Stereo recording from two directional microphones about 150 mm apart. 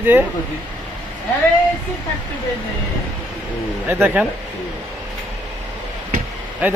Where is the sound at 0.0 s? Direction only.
15° right (ahead or behind).